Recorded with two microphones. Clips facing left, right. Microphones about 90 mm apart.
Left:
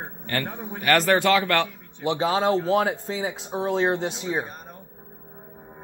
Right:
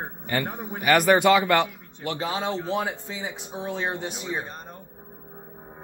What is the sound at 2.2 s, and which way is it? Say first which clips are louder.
A man's voice: left 7 dB; 35° left (ahead or behind).